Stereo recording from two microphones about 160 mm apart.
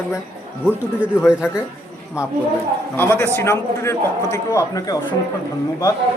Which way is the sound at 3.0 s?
15° left (ahead or behind).